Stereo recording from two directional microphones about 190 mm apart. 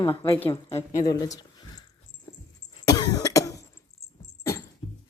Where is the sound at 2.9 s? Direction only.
20° left (ahead or behind).